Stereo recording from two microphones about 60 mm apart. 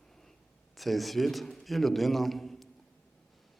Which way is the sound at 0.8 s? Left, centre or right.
Centre.